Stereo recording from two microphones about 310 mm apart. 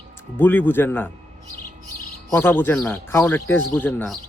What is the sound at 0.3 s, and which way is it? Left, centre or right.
Speech, centre.